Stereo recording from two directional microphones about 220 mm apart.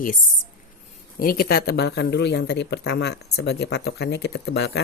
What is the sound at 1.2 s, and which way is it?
Speech, 40° left (ahead or behind).